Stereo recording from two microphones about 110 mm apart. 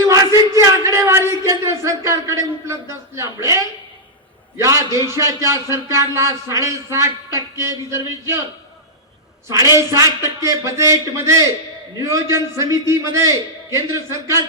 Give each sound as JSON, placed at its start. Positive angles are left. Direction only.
{"t": 0.0, "sound": "a sound", "side_deg": -30}
{"t": 4.5, "sound": "a man's voice", "side_deg": -30}
{"t": 9.7, "sound": "a man's voice", "side_deg": -30}